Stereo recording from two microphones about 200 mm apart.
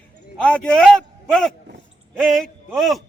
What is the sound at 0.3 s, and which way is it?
Speech, 5° left (ahead or behind).